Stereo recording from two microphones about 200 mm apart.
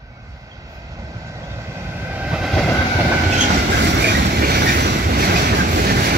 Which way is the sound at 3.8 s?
55° right (ahead or behind).